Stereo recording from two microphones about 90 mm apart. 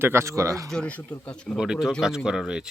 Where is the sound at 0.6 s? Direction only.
10° left (ahead or behind).